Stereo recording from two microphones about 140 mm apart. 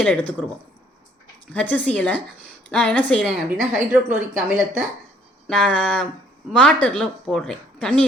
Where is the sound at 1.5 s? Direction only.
10° left (ahead or behind).